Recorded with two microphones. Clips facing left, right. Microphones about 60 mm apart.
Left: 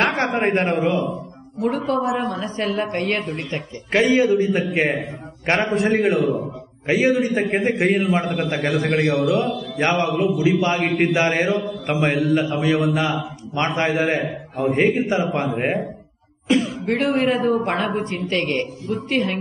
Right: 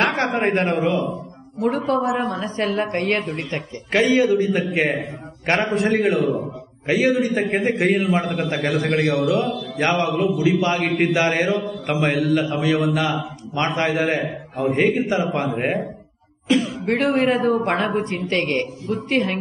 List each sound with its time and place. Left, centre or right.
0.0 s speech: centre
1.9 s speech: right
3.0 s speech: right
3.9 s a man's voice: centre
16.8 s speech: right